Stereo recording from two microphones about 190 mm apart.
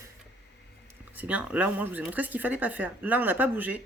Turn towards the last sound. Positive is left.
turn(degrees=-10)  # may be behind; listen again after turning